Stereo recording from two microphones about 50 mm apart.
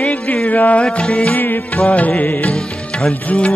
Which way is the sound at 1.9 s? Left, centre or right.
Left.